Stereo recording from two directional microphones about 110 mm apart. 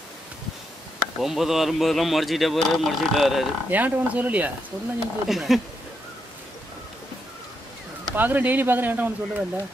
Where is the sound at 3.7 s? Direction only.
15° right (ahead or behind).